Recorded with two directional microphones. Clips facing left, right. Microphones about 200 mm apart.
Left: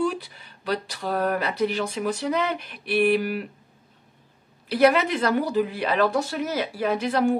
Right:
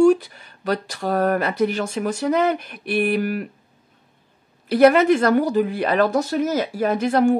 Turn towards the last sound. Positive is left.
turn(degrees=-50)  # may be behind; listen again after turning